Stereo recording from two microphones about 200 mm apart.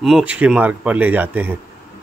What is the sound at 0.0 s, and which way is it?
Speech, 5° right (ahead or behind).